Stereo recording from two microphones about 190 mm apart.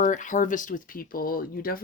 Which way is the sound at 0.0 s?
40° left (ahead or behind).